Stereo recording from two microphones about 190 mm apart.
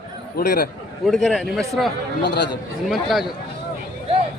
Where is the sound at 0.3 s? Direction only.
55° left (ahead or behind).